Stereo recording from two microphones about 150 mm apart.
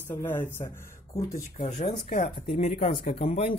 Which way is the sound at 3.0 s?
40° left (ahead or behind).